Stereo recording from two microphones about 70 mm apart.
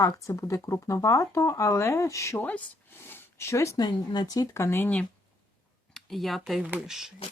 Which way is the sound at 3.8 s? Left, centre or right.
Left.